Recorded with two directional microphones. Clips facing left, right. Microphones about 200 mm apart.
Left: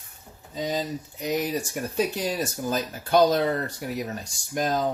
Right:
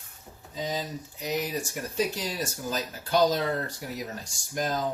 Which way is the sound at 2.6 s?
55° left (ahead or behind).